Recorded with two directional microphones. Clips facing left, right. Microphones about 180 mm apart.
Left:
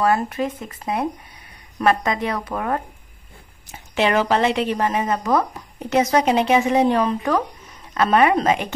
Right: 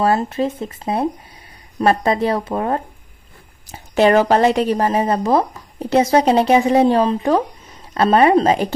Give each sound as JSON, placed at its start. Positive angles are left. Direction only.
{"t": 0.0, "sound": "speech", "side_deg": -30}
{"t": 3.6, "sound": "a woman's voice", "side_deg": -40}